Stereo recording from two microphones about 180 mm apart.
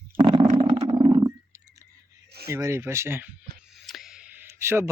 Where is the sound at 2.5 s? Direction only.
15° right (ahead or behind).